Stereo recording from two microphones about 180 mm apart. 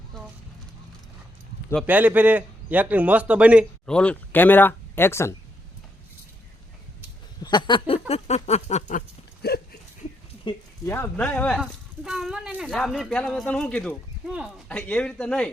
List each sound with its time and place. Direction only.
1.9 s a man's voice: 10° right (ahead or behind)
3.8 s speech: 5° left (ahead or behind)
7.4 s a sound: 25° left (ahead or behind); by 9.6 s 55° left (ahead or behind)
10.8 s speech: 15° left (ahead or behind)
14.3 s speech: 5° right (ahead or behind)
14.7 s speech: 5° left (ahead or behind)